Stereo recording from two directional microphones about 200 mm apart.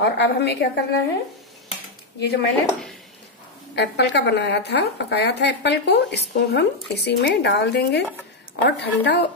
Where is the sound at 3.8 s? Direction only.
60° left (ahead or behind).